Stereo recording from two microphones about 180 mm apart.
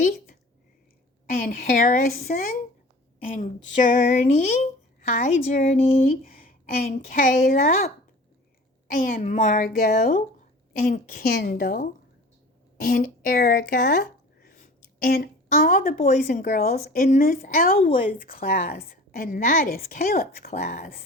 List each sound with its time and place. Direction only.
1.5 s a woman's voice: 50° left (ahead or behind)
5.1 s a woman's voice: 50° left (ahead or behind)
8.9 s a woman's voice: 50° left (ahead or behind)